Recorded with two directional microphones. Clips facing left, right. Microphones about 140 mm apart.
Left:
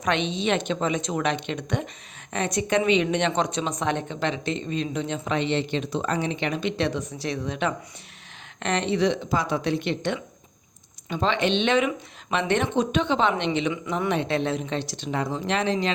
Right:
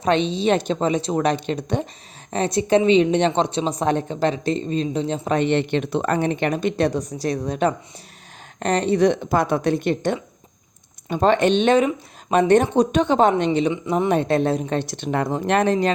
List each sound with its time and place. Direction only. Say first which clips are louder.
0.0 s a woman's voice: right 6 dB; 35° right (ahead or behind)
5.4 s a woman's voice: right 6 dB; 55° right (ahead or behind)